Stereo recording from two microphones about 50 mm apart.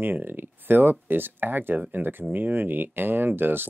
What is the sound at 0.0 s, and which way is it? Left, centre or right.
Speech, right.